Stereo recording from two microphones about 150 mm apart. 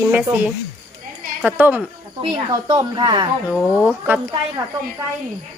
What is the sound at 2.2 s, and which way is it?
A woman's voice, 25° right (ahead or behind).